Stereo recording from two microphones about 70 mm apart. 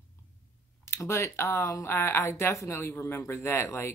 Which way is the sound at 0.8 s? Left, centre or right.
Left.